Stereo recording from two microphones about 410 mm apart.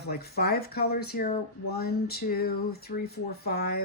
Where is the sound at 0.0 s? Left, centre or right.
Left.